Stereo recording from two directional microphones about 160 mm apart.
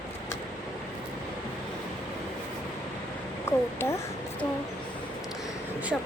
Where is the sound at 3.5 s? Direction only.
15° left (ahead or behind).